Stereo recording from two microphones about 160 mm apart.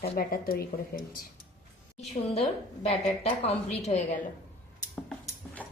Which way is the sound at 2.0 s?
40° left (ahead or behind).